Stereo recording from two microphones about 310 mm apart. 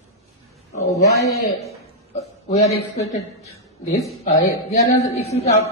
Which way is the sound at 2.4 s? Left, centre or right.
Left.